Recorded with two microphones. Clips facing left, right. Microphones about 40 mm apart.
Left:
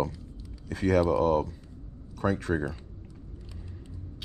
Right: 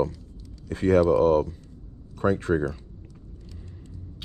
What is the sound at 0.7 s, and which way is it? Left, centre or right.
Speech, right.